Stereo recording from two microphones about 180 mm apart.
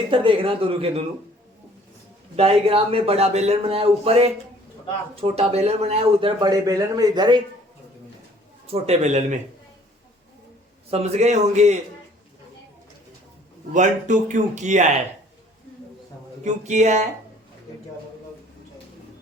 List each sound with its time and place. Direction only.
0.1 s a man's voice: 30° right (ahead or behind)
2.3 s a man's voice: 35° right (ahead or behind)
8.6 s a man's voice: 35° right (ahead or behind)
10.9 s a man's voice: 40° right (ahead or behind)
13.7 s speech: 40° right (ahead or behind)
16.4 s a man's voice: 40° right (ahead or behind)